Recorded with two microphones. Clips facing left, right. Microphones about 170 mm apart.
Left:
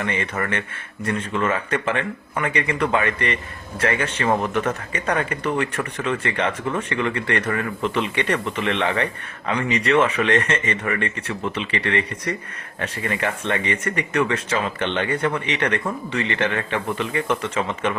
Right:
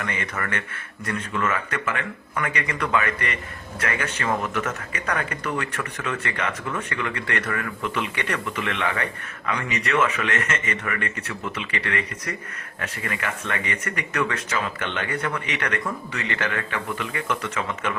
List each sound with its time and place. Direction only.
0.0 s speech: 25° left (ahead or behind)